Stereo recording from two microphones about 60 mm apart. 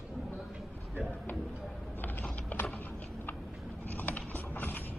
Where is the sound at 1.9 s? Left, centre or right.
Left.